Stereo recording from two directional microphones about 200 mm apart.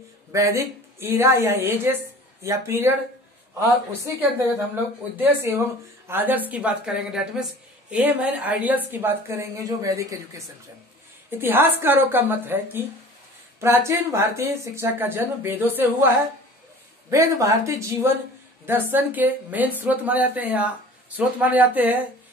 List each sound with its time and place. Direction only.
0.3 s a woman's voice: 15° right (ahead or behind)
17.1 s a woman's voice: 15° right (ahead or behind)